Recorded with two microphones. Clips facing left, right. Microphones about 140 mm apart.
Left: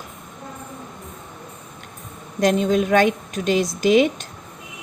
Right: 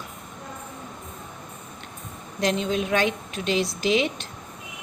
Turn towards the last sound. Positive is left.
turn(degrees=50)  # may be behind; listen again after turning